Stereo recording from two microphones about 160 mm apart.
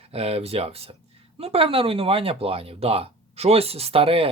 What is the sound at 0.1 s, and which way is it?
Speech, 40° right (ahead or behind).